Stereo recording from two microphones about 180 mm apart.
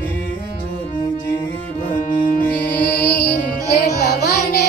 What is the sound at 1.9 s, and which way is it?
Music, 45° left (ahead or behind).